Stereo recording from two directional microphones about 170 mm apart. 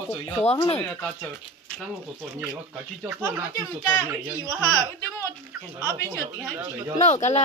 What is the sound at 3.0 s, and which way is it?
Speech, 15° right (ahead or behind).